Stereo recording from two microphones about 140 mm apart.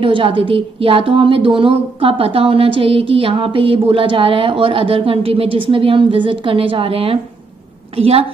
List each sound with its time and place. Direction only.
0.0 s a woman's voice: 40° right (ahead or behind)